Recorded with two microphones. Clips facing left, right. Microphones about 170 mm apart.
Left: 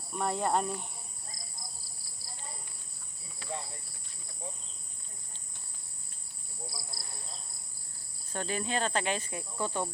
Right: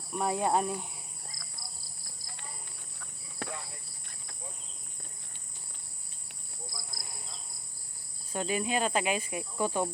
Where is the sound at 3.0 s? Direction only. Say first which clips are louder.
Right 11 dB; 60° right (ahead or behind).